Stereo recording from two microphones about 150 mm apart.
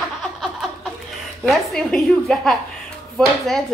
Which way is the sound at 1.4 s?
Centre (ahead or behind).